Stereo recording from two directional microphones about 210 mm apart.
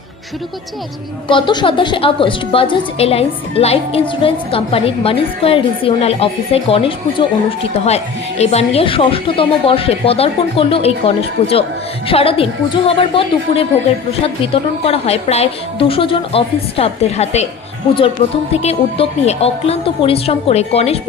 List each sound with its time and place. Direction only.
1.3 s a woman's voice: 20° left (ahead or behind)